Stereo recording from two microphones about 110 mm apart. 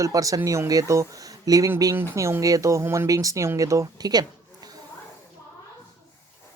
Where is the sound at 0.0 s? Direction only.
30° right (ahead or behind).